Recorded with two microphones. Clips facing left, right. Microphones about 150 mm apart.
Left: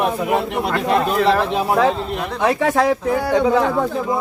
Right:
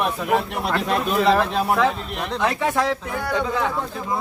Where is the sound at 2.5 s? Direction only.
40° left (ahead or behind).